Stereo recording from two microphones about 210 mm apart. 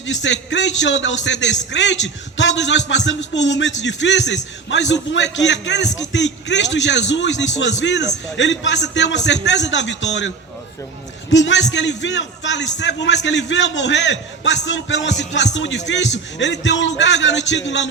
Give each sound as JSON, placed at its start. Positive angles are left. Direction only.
{"t": 0.0, "sound": "a man's voice", "side_deg": 60}